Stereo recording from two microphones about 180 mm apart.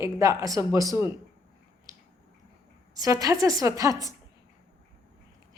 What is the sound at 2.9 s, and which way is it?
A woman's voice, 20° right (ahead or behind).